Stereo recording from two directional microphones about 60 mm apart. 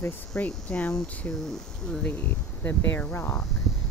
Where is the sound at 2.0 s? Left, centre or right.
Left.